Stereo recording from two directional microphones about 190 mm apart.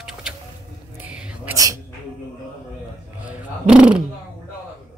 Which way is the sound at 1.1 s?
5° right (ahead or behind).